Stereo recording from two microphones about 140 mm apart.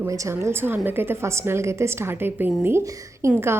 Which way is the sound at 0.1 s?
20° right (ahead or behind).